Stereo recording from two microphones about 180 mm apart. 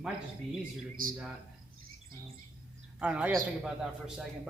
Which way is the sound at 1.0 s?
50° right (ahead or behind).